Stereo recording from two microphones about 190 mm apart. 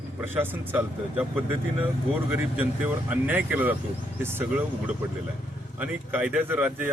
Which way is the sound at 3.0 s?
10° right (ahead or behind).